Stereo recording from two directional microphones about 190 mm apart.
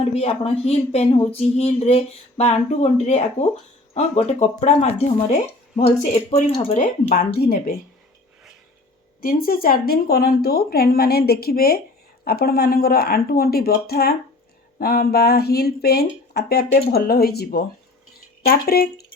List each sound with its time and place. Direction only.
0.0 s speech: 35° left (ahead or behind)
6.3 s speech: 35° left (ahead or behind)
7.3 s speech: 55° left (ahead or behind)
9.2 s speech: 50° left (ahead or behind)